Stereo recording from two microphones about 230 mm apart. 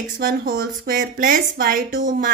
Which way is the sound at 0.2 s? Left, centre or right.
Right.